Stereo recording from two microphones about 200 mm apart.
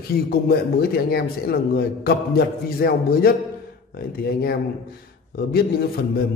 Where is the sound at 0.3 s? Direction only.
50° left (ahead or behind).